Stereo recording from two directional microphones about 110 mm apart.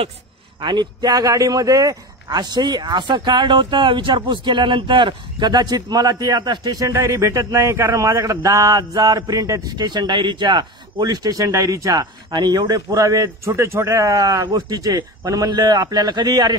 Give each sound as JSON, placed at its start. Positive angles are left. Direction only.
{"t": 0.6, "sound": "speech", "side_deg": -45}